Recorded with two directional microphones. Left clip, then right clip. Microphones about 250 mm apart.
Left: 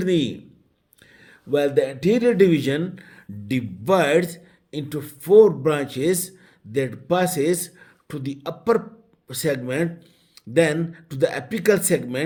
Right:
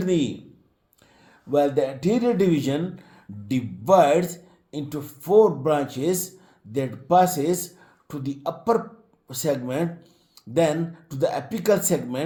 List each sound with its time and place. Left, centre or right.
0.0 s speech: left
1.5 s a man's voice: left